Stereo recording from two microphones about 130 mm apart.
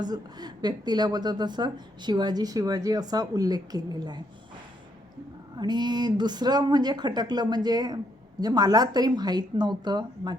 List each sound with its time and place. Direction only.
0.0 s speech: 30° right (ahead or behind)
5.5 s speech: 35° right (ahead or behind)